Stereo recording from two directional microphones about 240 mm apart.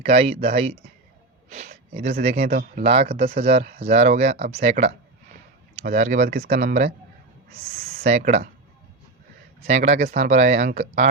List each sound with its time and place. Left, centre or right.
0.0 s speech: right
1.5 s a sound: right
2.4 s speech: right
2.8 s speech: right
8.0 s speech: right
9.6 s speech: right